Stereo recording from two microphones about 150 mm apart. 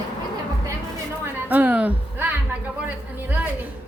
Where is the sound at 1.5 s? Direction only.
10° right (ahead or behind).